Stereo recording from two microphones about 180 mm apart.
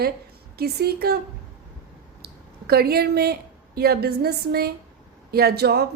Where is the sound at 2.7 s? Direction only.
60° right (ahead or behind).